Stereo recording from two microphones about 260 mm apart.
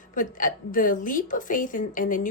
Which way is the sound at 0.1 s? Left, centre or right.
Left.